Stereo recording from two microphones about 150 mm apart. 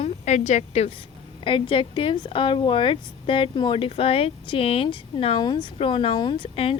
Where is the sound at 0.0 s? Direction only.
50° left (ahead or behind).